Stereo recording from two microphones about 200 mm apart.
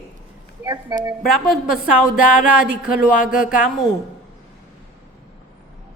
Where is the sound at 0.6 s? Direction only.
20° right (ahead or behind).